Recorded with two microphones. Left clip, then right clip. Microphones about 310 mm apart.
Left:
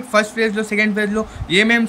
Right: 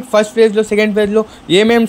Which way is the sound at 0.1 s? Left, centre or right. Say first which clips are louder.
Right 6 dB; centre.